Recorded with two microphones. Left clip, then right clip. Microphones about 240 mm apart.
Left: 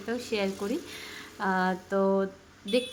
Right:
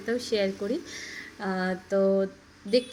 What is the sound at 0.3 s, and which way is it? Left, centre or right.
Speech, centre.